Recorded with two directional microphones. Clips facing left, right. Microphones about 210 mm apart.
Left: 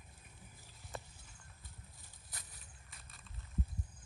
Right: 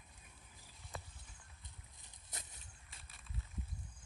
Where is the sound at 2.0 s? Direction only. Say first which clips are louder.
Right 2 dB; 20° right (ahead or behind).